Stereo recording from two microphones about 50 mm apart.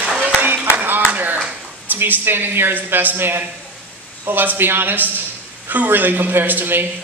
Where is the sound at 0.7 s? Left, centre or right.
Right.